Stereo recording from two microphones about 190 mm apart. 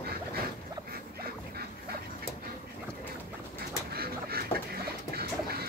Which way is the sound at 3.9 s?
55° right (ahead or behind).